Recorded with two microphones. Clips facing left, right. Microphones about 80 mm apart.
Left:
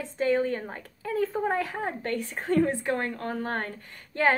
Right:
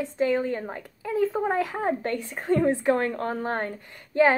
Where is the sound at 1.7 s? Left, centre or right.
Right.